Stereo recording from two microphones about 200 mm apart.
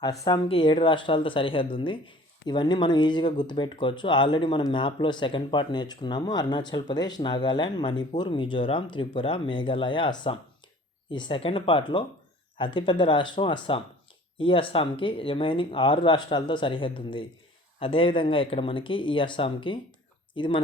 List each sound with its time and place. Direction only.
0.0 s speech: 20° left (ahead or behind)